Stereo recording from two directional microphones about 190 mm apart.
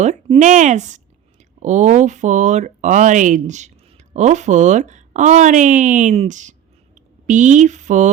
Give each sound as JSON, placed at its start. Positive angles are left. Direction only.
{"t": 0.0, "sound": "speech", "side_deg": -35}